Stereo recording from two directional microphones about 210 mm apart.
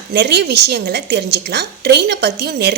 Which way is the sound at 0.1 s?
50° right (ahead or behind).